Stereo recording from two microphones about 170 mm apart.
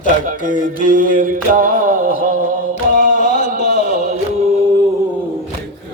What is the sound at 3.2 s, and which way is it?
Music, 45° left (ahead or behind).